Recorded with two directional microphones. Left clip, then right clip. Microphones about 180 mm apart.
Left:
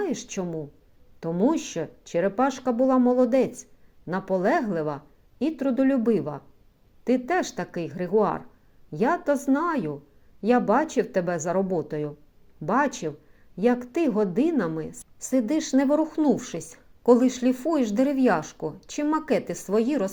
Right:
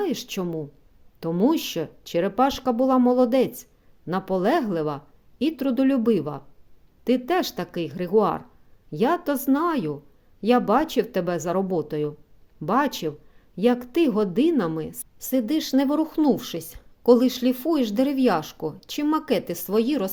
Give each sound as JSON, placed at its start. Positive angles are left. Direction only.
{"t": 0.0, "sound": "speech", "side_deg": -25}